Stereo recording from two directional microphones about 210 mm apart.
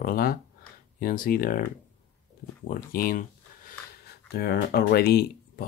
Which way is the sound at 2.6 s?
40° left (ahead or behind).